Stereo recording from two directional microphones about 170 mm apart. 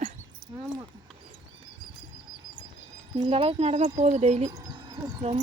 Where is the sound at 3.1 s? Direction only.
35° right (ahead or behind).